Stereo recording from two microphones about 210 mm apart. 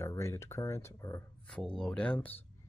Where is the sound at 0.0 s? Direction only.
10° left (ahead or behind).